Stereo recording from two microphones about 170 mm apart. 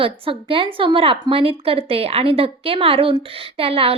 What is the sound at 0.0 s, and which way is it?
Speech, 30° right (ahead or behind).